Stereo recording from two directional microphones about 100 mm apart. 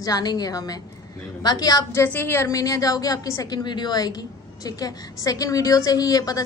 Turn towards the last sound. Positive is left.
turn(degrees=35)  # may be behind; listen again after turning